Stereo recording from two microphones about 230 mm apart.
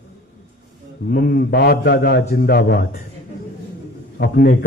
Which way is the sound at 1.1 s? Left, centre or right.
Left.